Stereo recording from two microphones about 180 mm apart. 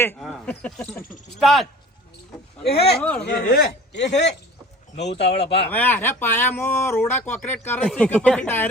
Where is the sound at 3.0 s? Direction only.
5° left (ahead or behind).